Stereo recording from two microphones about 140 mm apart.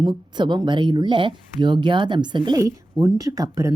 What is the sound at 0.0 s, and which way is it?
Speech, 30° right (ahead or behind).